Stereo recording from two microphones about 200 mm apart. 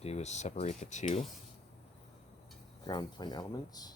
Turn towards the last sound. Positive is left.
turn(degrees=20)  # may be behind; listen again after turning